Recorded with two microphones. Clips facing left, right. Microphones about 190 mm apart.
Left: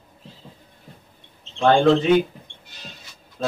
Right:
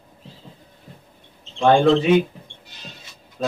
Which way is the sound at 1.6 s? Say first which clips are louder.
Right 1 dB; 10° right (ahead or behind).